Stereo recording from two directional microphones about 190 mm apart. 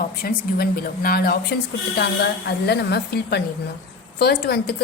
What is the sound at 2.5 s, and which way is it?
A woman's voice, 60° left (ahead or behind).